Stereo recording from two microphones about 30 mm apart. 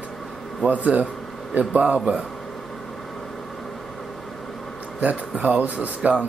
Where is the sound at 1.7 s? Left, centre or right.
Right.